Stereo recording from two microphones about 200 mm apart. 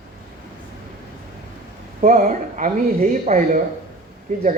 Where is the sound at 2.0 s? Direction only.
40° right (ahead or behind).